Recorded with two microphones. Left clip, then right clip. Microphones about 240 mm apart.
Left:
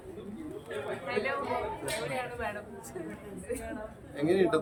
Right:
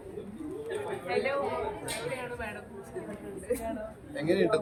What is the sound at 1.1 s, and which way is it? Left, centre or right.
Speech, centre.